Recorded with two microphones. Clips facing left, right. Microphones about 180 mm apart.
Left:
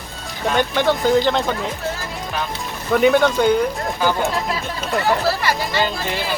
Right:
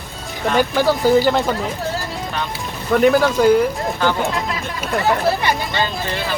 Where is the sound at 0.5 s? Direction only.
5° right (ahead or behind).